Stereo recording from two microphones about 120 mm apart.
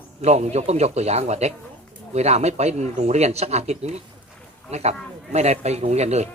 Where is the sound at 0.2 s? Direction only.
65° right (ahead or behind).